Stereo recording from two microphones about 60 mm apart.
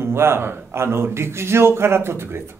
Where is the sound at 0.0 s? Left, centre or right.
Right.